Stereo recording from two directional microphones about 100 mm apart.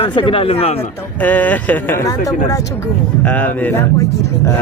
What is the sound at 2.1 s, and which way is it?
Speech, 35° left (ahead or behind).